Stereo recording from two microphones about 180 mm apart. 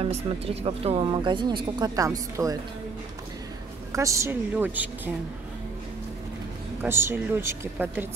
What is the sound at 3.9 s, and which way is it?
Speech, 15° right (ahead or behind).